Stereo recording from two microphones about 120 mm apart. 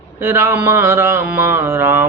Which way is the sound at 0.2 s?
20° right (ahead or behind).